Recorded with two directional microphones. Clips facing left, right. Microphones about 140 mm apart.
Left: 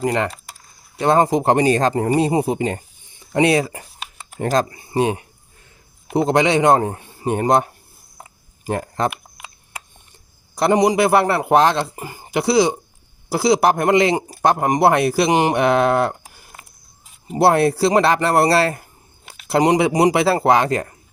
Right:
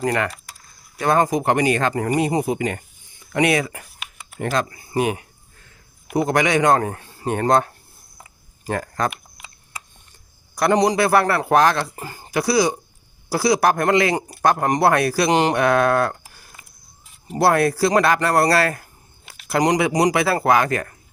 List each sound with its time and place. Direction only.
0.0 s speech: 25° left (ahead or behind)
10.5 s speech: 25° left (ahead or behind)